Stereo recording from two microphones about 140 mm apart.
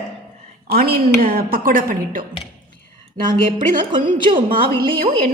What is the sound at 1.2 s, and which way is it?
A woman's voice, 90° right.